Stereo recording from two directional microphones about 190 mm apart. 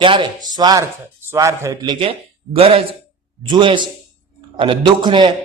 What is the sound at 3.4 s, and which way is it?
A man's voice, 25° right (ahead or behind).